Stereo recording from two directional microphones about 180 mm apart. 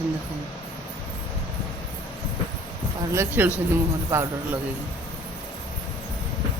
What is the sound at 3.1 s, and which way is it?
Speech, 15° right (ahead or behind).